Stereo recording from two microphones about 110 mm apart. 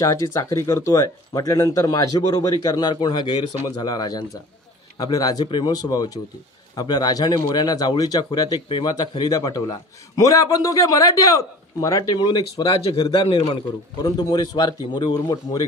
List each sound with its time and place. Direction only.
0.0 s a man's voice: 30° left (ahead or behind)
8.6 s speech: 50° left (ahead or behind)
8.9 s a man's voice: 40° left (ahead or behind)